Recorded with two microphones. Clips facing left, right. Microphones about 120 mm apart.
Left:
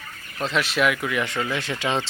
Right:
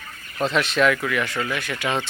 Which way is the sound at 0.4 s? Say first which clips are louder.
Right 3 dB; centre (ahead or behind).